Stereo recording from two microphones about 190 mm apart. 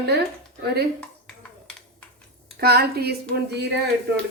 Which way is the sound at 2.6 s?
55° right (ahead or behind).